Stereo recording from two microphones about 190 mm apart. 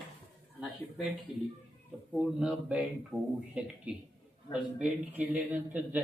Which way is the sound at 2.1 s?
5° right (ahead or behind).